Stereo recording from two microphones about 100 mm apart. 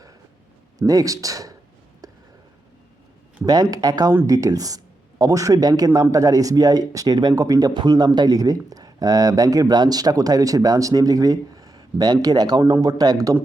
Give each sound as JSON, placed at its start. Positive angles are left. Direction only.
{"t": 0.8, "sound": "speech", "side_deg": -35}
{"t": 2.0, "sound": "a sound", "side_deg": -35}
{"t": 3.4, "sound": "speech", "side_deg": -40}